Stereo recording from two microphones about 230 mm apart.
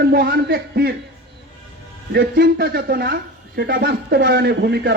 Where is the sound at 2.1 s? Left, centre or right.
Right.